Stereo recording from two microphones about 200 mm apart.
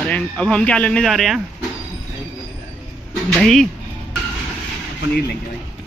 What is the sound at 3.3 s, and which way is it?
Speech, centre (ahead or behind).